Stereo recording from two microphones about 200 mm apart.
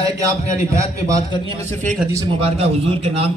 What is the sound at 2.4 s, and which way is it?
Speech, 30° right (ahead or behind).